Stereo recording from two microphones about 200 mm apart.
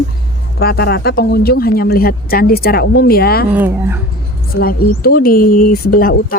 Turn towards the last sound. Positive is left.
turn(degrees=45)  # may be behind; listen again after turning